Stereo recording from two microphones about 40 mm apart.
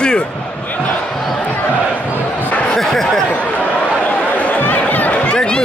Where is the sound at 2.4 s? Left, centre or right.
Left.